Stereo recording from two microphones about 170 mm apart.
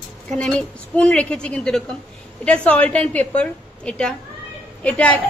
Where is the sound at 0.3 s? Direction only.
5° left (ahead or behind).